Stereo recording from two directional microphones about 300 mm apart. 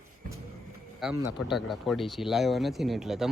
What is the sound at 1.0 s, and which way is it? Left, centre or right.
Speech, centre.